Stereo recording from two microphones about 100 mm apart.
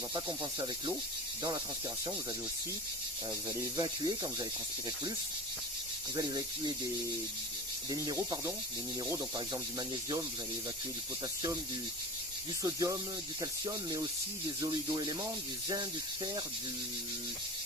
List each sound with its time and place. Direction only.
0.1 s speech: 45° right (ahead or behind)
3.8 s speech: 45° right (ahead or behind)
6.1 s speech: 40° right (ahead or behind)
7.9 s speech: 35° right (ahead or behind)
12.6 s speech: 35° right (ahead or behind)